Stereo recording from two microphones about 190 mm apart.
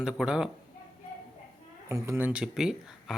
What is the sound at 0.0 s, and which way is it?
Speech, 5° right (ahead or behind).